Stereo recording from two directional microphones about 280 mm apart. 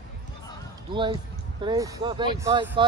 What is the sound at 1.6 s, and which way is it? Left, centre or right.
Speech, centre.